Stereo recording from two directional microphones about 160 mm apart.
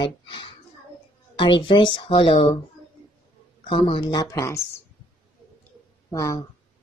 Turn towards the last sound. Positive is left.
turn(degrees=20)  # may be behind; listen again after turning